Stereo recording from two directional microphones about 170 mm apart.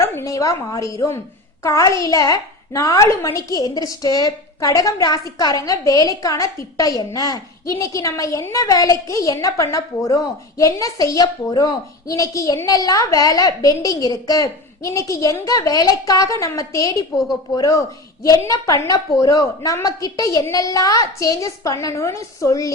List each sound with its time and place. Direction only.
0.0 s a woman's voice: 15° left (ahead or behind)